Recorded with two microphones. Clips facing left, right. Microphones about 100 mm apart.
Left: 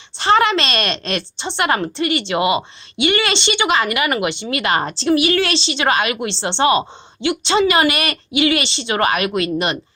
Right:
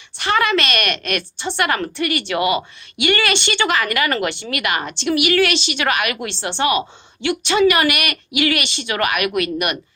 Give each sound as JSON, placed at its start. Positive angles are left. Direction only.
{"t": 0.2, "sound": "a woman's voice", "side_deg": 25}